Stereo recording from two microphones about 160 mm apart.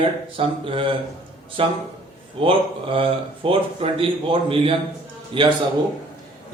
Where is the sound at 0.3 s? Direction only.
35° right (ahead or behind).